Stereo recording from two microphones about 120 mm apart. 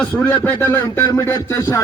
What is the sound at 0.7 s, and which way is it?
A man's voice, 30° left (ahead or behind).